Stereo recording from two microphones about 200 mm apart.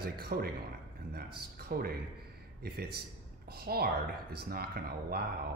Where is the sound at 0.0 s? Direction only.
50° right (ahead or behind).